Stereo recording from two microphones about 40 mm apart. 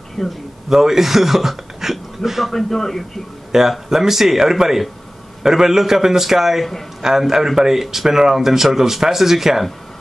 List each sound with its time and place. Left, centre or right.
0.2 s speech: centre
0.7 s speech: centre
2.5 s speech: centre
3.5 s speech: centre